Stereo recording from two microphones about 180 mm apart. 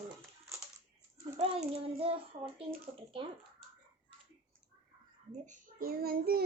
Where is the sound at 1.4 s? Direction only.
30° right (ahead or behind).